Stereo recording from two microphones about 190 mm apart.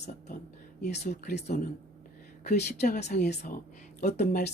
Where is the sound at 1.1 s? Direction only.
60° left (ahead or behind).